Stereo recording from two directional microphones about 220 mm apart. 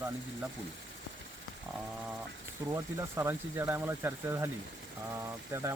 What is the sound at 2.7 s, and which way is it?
Speech, 15° right (ahead or behind).